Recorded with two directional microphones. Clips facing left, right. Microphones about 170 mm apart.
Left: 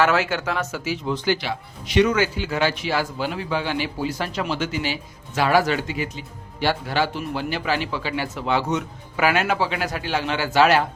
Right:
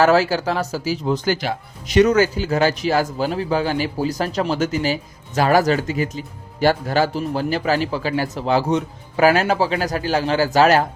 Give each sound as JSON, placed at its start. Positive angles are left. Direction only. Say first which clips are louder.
{"t": 0.0, "sound": "speech", "louder": "right 5 dB", "side_deg": -35}